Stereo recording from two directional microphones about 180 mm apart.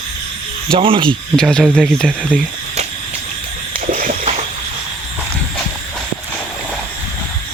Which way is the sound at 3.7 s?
50° right (ahead or behind).